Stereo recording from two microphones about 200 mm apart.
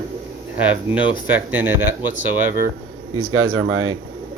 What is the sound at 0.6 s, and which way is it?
Speech, 5° right (ahead or behind).